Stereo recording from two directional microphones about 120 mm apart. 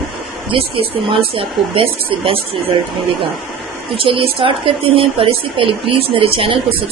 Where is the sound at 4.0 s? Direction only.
45° right (ahead or behind).